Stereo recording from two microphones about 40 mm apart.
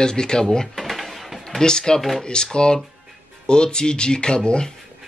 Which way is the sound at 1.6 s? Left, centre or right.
Centre.